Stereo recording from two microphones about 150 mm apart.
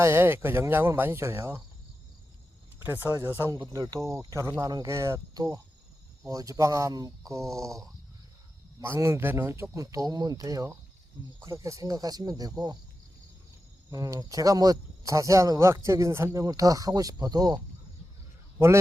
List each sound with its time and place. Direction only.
0.0 s speech: 15° right (ahead or behind)
2.8 s speech: 15° right (ahead or behind)
3.6 s speech: 25° right (ahead or behind)
8.8 s speech: 20° right (ahead or behind)
13.9 s speech: 25° right (ahead or behind)